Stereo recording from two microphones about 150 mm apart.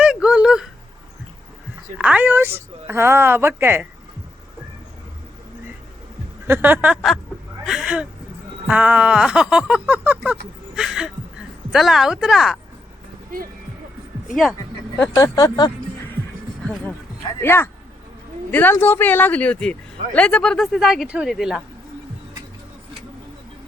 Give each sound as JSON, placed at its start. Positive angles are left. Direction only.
{"t": 0.0, "sound": "a sound", "side_deg": -5}
{"t": 2.0, "sound": "a woman's voice", "side_deg": -10}
{"t": 6.5, "sound": "a woman's voice", "side_deg": -15}
{"t": 10.8, "sound": "a sound", "side_deg": -5}
{"t": 11.7, "sound": "speech", "side_deg": 0}
{"t": 14.9, "sound": "speech", "side_deg": 20}
{"t": 17.4, "sound": "speech", "side_deg": 15}